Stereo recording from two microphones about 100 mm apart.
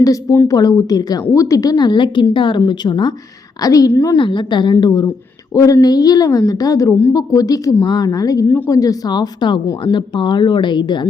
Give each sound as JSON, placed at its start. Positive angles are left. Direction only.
{"t": 0.0, "sound": "a woman's voice", "side_deg": 35}
{"t": 3.6, "sound": "a woman's voice", "side_deg": 35}
{"t": 4.2, "sound": "a woman's voice", "side_deg": 55}